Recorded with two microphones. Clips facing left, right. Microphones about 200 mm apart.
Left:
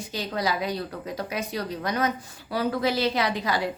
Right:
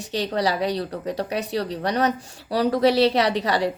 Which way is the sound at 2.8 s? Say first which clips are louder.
Right 8 dB; 70° right (ahead or behind).